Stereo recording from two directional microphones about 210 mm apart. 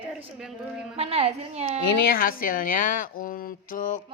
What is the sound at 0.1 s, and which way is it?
Speech, centre (ahead or behind).